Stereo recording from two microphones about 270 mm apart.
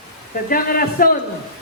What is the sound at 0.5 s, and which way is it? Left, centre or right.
Speech, left.